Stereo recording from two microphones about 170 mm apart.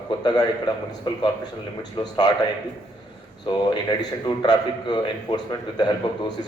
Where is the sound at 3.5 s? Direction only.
25° left (ahead or behind).